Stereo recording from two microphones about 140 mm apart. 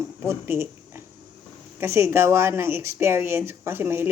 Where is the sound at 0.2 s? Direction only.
15° right (ahead or behind).